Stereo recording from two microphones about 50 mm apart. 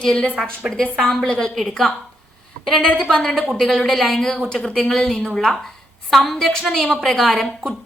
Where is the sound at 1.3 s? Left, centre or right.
Centre.